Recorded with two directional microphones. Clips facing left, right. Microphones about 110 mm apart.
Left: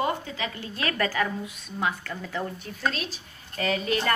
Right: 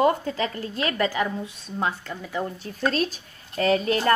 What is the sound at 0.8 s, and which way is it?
Speech, 25° right (ahead or behind).